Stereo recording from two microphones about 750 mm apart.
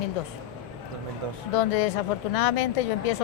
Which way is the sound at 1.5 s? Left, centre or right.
Left.